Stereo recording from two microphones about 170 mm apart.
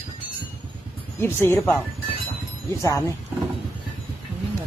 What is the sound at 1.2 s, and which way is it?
Speech, 15° left (ahead or behind).